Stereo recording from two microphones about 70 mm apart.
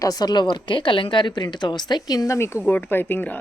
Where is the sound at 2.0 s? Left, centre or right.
Left.